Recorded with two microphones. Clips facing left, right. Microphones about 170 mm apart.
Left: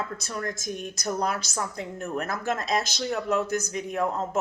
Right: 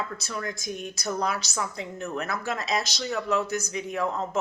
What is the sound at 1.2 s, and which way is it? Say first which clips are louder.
A woman's voice: even; 50° left (ahead or behind).